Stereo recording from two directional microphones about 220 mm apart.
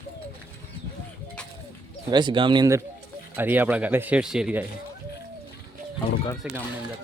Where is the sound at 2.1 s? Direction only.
20° right (ahead or behind).